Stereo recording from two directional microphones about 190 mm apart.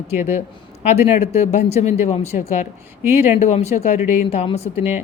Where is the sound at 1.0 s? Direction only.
35° left (ahead or behind).